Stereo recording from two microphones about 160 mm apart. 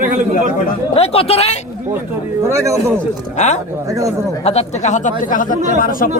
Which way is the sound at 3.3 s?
45° left (ahead or behind).